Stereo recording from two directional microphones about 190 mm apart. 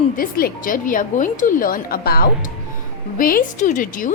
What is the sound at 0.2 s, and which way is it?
A woman's voice, 50° left (ahead or behind).